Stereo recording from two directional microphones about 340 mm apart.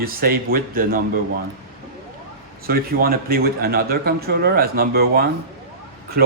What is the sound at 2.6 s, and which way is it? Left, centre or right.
Speech, right.